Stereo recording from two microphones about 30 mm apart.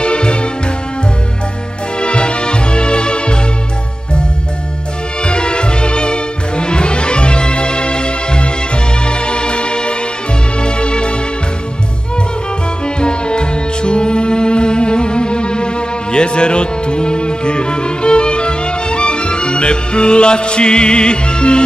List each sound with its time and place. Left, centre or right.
0.0 s music: left
2.0 s music: left
5.2 s music: left
12.8 s music: left